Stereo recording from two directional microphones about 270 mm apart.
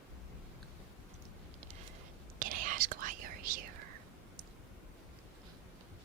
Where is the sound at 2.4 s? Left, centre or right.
Right.